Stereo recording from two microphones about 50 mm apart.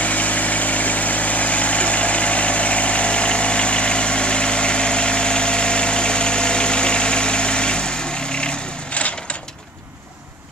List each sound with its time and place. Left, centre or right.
0.0 s vehicle: left